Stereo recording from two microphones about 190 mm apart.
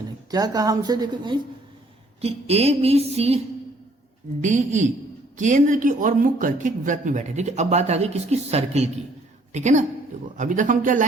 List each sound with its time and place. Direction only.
0.3 s a woman's voice: 20° right (ahead or behind); by 11.0 s 45° right (ahead or behind)